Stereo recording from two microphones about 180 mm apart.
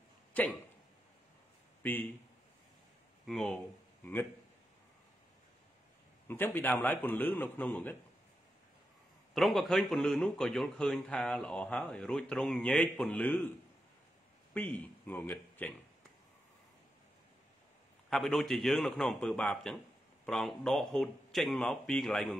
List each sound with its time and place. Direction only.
0.3 s a sound: 10° left (ahead or behind)
1.8 s a man's voice: 10° left (ahead or behind)
3.3 s speech: centre (ahead or behind)
6.2 s a man's voice: 10° left (ahead or behind)
9.3 s speech: centre (ahead or behind)
14.5 s speech: 10° left (ahead or behind)
18.1 s speech: centre (ahead or behind)